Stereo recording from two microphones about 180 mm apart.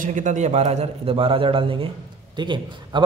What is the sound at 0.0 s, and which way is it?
A man's voice, 45° right (ahead or behind).